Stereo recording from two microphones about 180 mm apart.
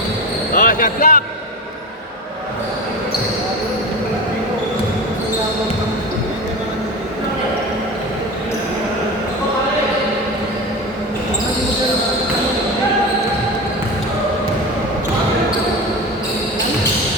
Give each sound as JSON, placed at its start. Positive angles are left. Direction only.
{"t": 0.5, "sound": "speech", "side_deg": 50}